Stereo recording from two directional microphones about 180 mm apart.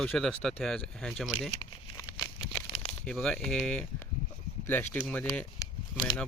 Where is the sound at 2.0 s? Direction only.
20° left (ahead or behind).